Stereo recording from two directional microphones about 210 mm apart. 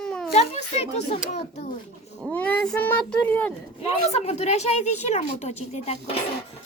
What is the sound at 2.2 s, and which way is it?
Speech, 5° left (ahead or behind).